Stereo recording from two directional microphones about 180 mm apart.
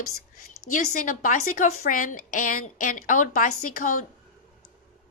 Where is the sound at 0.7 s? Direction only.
45° left (ahead or behind).